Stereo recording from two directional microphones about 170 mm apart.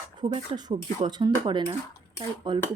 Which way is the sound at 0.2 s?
25° right (ahead or behind).